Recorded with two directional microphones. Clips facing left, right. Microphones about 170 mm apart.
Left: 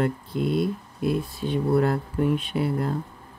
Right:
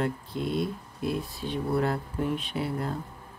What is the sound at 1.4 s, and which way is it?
Speech, 55° left (ahead or behind).